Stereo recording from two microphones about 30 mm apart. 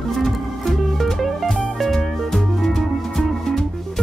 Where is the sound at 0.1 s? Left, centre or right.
Centre.